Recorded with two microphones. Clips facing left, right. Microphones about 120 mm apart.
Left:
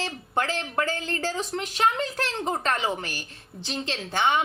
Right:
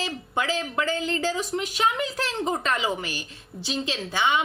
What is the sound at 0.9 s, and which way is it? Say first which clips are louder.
Speech: right 3 dB; 20° right (ahead or behind).